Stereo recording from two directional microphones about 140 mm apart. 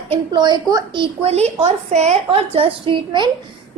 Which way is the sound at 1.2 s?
50° right (ahead or behind).